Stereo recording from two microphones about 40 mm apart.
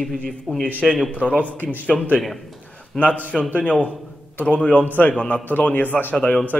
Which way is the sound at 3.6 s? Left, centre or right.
Left.